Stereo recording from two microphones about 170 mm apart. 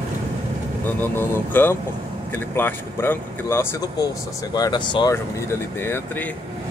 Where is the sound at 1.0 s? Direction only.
10° left (ahead or behind).